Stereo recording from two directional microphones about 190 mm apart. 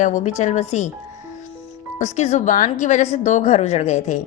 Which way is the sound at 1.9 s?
40° left (ahead or behind).